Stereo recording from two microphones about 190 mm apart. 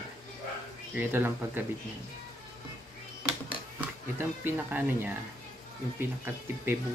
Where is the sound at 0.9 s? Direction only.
10° right (ahead or behind).